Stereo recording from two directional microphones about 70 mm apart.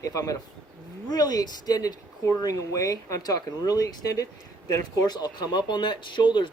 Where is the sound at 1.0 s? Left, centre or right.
Left.